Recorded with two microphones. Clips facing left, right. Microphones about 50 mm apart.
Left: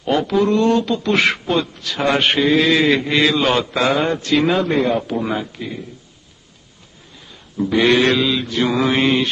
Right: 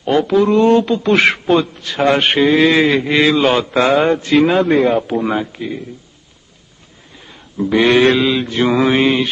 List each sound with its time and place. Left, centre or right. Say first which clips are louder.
0.1 s a man's voice: right 4 dB; centre
0.7 s speech: right 4 dB; right
1.8 s a sound: right 5 dB; right
2.1 s a man's voice: right 1 dB; centre
5.6 s speech: right 5 dB; right
7.5 s speech: right 3 dB; centre
8.2 s speech: right 3 dB; right
8.7 s speech: right 3 dB; centre